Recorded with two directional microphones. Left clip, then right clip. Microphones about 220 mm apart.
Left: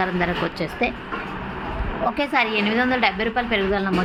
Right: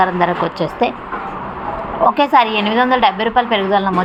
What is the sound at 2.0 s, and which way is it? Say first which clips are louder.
A woman's voice: right 10 dB; 10° right (ahead or behind).